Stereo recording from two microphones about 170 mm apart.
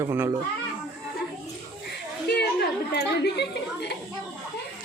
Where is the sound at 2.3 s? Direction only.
85° left.